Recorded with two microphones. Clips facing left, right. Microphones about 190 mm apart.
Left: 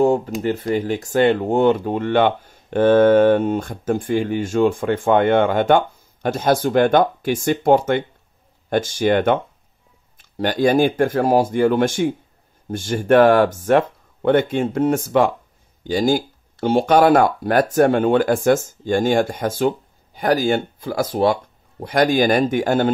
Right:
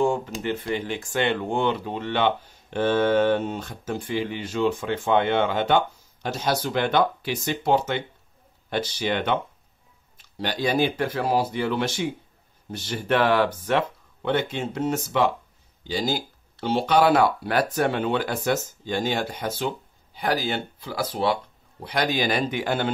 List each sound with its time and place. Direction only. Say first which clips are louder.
0.0 s speech: left 7 dB; 40° left (ahead or behind)